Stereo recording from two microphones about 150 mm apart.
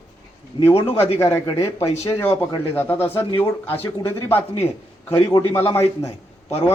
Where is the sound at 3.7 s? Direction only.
40° left (ahead or behind).